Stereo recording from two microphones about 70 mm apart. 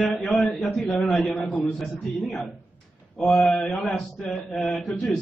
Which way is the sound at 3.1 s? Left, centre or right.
Centre.